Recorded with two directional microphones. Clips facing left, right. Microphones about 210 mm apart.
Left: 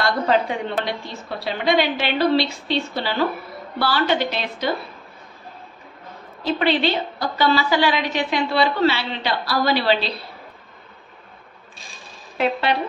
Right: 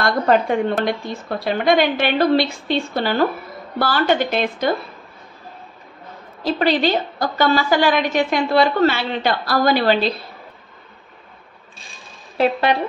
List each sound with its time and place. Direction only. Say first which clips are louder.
0.0 s a woman's voice: right 3 dB; 50° right (ahead or behind)
6.4 s a woman's voice: right 2 dB; 40° right (ahead or behind)
12.4 s a woman's voice: right 4 dB; 45° right (ahead or behind)